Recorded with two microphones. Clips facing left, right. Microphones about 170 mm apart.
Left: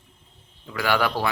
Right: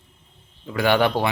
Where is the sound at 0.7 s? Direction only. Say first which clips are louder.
Right 5 dB; 25° right (ahead or behind).